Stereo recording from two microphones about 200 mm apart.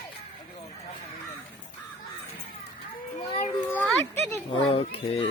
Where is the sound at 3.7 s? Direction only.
5° left (ahead or behind).